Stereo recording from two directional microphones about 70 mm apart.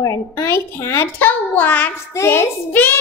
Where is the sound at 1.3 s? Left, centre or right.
Left.